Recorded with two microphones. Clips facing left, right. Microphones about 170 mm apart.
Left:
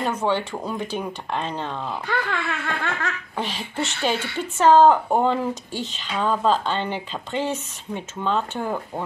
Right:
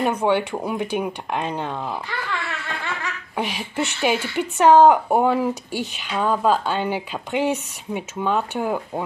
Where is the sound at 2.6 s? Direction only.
50° left (ahead or behind).